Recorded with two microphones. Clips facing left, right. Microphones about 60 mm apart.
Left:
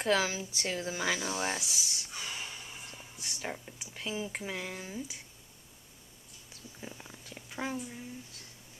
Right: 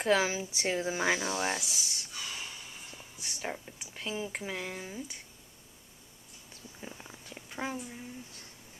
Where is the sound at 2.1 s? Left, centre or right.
Left.